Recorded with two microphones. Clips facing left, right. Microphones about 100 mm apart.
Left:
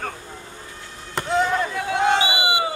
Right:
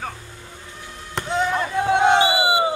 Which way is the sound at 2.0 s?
20° right (ahead or behind).